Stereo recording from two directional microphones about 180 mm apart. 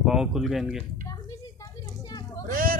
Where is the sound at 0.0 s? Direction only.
Centre (ahead or behind).